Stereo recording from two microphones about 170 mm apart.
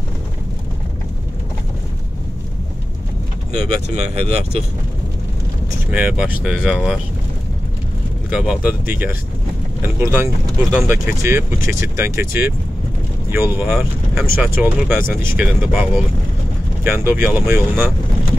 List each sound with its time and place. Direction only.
3.5 s speech: 40° right (ahead or behind)
5.9 s speech: 5° right (ahead or behind)
8.3 s speech: 5° right (ahead or behind)
13.7 s speech: 5° right (ahead or behind)
16.8 s speech: 15° right (ahead or behind)